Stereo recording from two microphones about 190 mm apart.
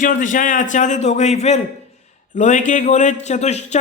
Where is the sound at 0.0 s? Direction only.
45° left (ahead or behind).